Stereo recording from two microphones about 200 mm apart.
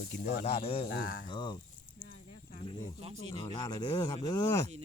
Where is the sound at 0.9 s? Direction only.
45° left (ahead or behind).